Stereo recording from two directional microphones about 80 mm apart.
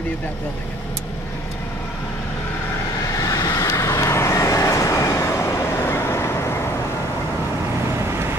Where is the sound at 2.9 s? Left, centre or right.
Left.